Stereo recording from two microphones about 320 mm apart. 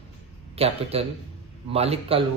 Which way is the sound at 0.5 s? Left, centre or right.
Centre.